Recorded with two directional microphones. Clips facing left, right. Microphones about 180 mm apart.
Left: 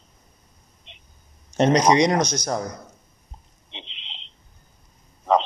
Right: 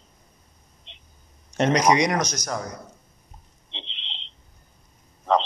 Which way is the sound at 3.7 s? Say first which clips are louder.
Even; 10° left (ahead or behind).